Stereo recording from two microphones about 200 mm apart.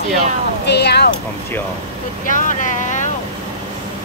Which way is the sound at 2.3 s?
40° left (ahead or behind).